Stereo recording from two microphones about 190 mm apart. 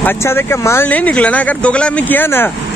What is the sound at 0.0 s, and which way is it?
Speech, 15° left (ahead or behind).